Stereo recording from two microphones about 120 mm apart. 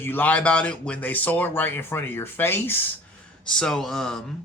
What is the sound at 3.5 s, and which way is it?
Speech, 5° left (ahead or behind).